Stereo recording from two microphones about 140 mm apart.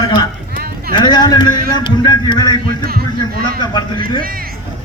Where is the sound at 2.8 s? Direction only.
90° right.